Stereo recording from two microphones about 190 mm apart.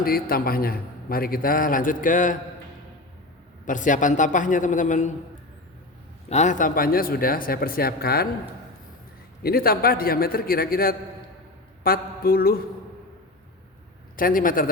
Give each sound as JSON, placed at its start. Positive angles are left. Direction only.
{"t": 0.0, "sound": "a man's voice", "side_deg": 50}
{"t": 3.7, "sound": "a man's voice", "side_deg": 40}
{"t": 6.2, "sound": "a man's voice", "side_deg": 40}
{"t": 9.4, "sound": "a man's voice", "side_deg": 50}
{"t": 14.2, "sound": "a man's voice", "side_deg": 45}